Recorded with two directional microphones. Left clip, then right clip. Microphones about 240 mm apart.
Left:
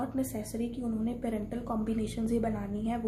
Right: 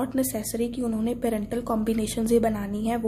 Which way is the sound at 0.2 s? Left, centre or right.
Right.